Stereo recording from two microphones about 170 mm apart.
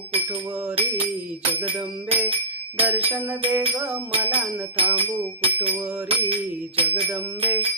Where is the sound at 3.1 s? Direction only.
10° right (ahead or behind).